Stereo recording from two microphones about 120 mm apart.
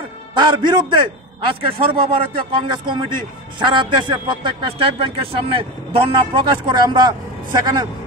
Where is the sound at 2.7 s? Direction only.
40° right (ahead or behind).